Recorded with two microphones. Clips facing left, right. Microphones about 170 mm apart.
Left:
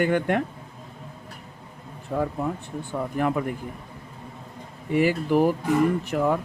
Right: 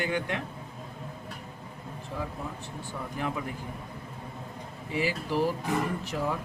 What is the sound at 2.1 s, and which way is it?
A man's voice, 60° left (ahead or behind).